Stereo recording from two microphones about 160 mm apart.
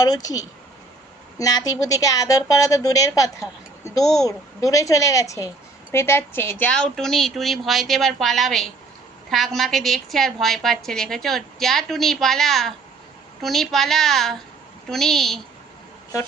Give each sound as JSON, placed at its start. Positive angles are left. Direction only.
{"t": 0.0, "sound": "a woman's voice", "side_deg": 25}